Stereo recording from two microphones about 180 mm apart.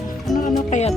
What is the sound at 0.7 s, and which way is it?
Music, 40° left (ahead or behind).